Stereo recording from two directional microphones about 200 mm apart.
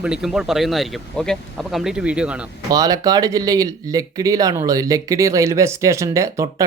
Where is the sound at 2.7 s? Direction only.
20° right (ahead or behind).